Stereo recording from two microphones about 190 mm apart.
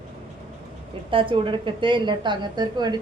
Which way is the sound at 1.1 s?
25° right (ahead or behind).